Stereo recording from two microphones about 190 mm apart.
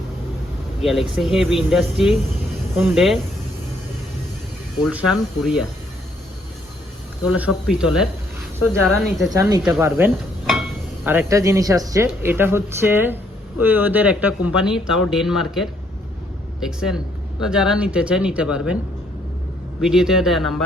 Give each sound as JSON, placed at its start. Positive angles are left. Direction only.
{"t": 0.8, "sound": "speech", "side_deg": 0}
{"t": 4.8, "sound": "speech", "side_deg": -5}
{"t": 7.3, "sound": "speech", "side_deg": -5}
{"t": 9.3, "sound": "speech", "side_deg": -15}
{"t": 11.0, "sound": "speech", "side_deg": -10}
{"t": 19.8, "sound": "speech", "side_deg": 0}